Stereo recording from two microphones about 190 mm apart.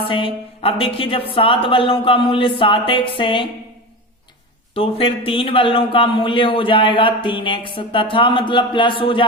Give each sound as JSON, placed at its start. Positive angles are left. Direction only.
{"t": 0.0, "sound": "a man's voice", "side_deg": 25}
{"t": 4.7, "sound": "a man's voice", "side_deg": 30}